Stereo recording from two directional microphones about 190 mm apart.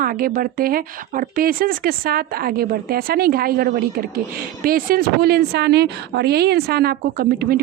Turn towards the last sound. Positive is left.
turn(degrees=-50)  # may be behind; listen again after turning